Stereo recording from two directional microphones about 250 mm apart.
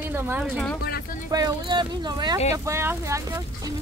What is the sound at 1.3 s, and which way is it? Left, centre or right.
Speech, centre.